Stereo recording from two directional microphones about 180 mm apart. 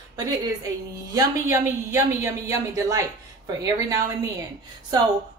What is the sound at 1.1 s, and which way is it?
Speech, 20° right (ahead or behind).